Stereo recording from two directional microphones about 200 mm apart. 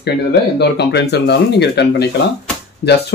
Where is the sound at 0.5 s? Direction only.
55° left (ahead or behind).